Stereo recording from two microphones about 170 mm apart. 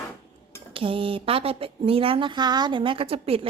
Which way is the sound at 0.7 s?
30° right (ahead or behind).